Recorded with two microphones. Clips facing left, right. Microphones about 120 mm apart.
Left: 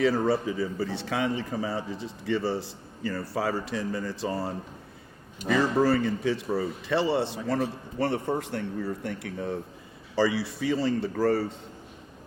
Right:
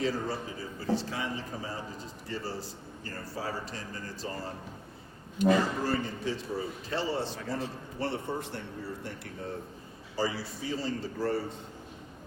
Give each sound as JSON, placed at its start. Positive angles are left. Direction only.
{"t": 0.0, "sound": "a man's voice", "side_deg": 75}
{"t": 5.8, "sound": "a man's voice", "side_deg": 70}